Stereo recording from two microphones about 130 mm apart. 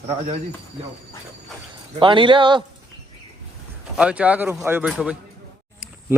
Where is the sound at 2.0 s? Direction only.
40° right (ahead or behind).